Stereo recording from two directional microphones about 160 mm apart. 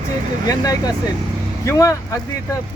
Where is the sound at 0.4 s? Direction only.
20° left (ahead or behind).